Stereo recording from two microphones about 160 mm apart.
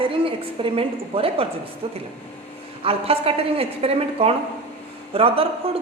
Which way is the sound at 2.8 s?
35° right (ahead or behind).